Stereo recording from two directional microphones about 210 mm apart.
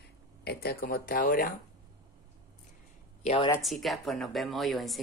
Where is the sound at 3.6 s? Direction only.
Centre (ahead or behind).